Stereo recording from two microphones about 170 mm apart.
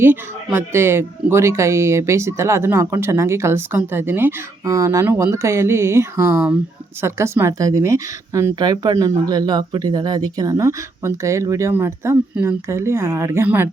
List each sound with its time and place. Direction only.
0.0 s speech: 15° right (ahead or behind)